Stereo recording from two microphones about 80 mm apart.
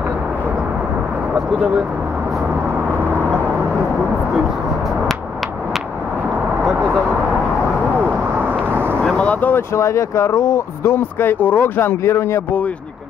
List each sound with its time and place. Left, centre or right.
9.0 s speech: centre; by 12.4 s left